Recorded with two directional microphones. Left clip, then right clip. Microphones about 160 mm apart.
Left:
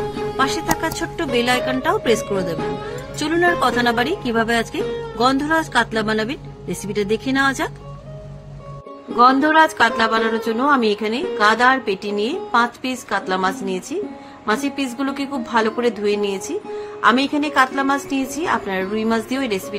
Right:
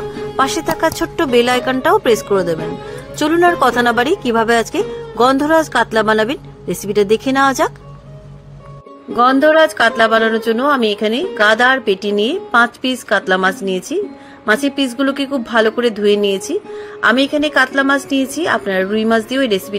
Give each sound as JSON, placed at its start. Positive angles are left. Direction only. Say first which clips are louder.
{"t": 0.0, "sound": "music", "louder": "even", "side_deg": 0}
{"t": 0.4, "sound": "speech", "louder": "right 5 dB", "side_deg": -50}
{"t": 2.5, "sound": "speech", "louder": "right 3 dB", "side_deg": 0}
{"t": 3.2, "sound": "speech", "louder": "right 5 dB", "side_deg": -45}
{"t": 9.1, "sound": "a woman's voice", "louder": "right 3 dB", "side_deg": -30}